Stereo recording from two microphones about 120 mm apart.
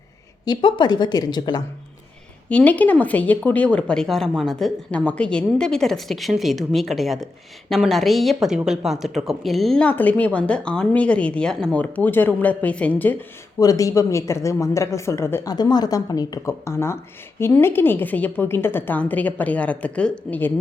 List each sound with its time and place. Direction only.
0.4 s speech: 40° left (ahead or behind)
2.5 s a woman's voice: 10° left (ahead or behind)
13.6 s a woman's voice: 30° left (ahead or behind)
15.4 s a woman's voice: 35° left (ahead or behind); by 20.5 s 10° left (ahead or behind)